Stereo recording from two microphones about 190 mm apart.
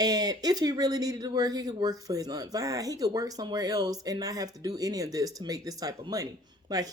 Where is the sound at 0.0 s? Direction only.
20° right (ahead or behind).